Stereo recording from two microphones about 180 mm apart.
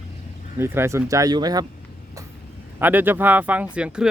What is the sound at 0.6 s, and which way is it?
Speech, 15° right (ahead or behind).